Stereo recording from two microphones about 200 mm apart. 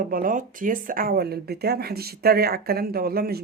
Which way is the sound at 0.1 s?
45° right (ahead or behind).